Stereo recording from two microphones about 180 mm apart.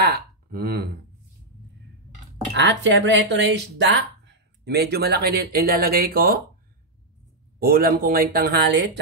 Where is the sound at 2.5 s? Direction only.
80° right.